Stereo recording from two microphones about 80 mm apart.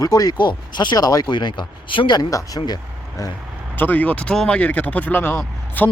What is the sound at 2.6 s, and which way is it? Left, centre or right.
Speech, left.